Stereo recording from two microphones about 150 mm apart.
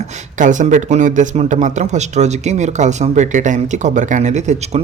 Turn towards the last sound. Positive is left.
turn(degrees=-50)  # may be behind; listen again after turning